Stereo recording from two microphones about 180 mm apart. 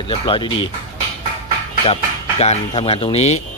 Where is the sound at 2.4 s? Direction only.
35° left (ahead or behind).